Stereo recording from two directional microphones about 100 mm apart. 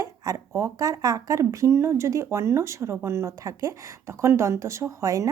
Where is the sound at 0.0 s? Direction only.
35° right (ahead or behind).